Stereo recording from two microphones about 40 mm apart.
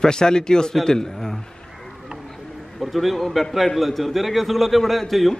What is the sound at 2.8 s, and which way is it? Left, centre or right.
A man's voice, centre.